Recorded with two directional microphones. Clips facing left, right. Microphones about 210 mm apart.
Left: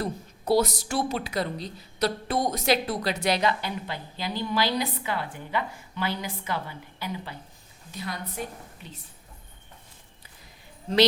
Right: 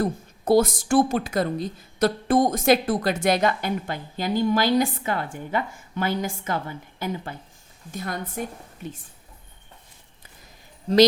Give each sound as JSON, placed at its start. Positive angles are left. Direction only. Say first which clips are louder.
{"t": 0.0, "sound": "a woman's voice", "louder": "right 6 dB", "side_deg": -50}